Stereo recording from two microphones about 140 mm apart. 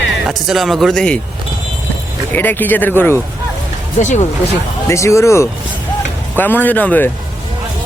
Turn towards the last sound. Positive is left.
turn(degrees=10)  # may be behind; listen again after turning